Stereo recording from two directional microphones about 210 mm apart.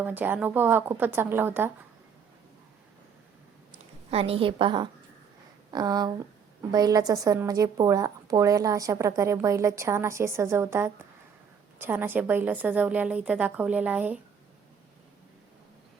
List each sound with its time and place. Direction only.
0.0 s a woman's voice: 10° right (ahead or behind)
4.1 s a woman's voice: 25° right (ahead or behind); by 14.2 s 5° right (ahead or behind)